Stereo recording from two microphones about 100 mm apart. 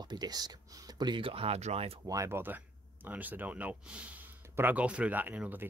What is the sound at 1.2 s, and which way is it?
Speech, 75° right (ahead or behind).